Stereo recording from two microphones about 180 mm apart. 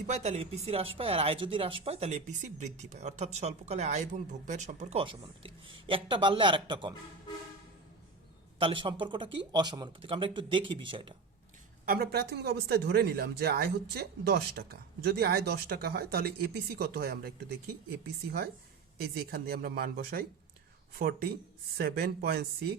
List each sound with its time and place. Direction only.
0.1 s speech: 35° right (ahead or behind)
8.5 s speech: 30° right (ahead or behind)
11.9 s speech: 60° right (ahead or behind)